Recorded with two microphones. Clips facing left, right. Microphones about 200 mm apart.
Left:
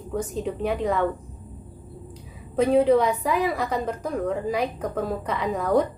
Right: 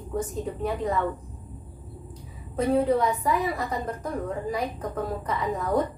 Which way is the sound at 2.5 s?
80° left.